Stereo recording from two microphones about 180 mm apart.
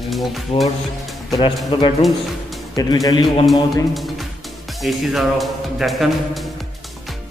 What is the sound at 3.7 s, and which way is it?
Music, centre (ahead or behind).